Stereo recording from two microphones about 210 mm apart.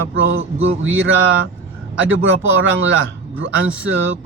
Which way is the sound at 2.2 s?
60° right (ahead or behind).